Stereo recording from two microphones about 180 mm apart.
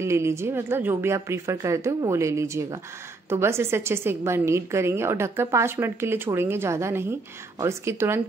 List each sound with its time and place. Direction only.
0.0 s a woman's voice: 15° right (ahead or behind)